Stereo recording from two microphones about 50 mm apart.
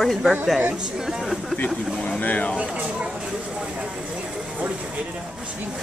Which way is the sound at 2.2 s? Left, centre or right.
Left.